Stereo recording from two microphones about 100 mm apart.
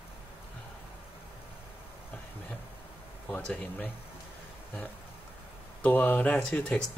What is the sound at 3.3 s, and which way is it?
Speech, 10° left (ahead or behind).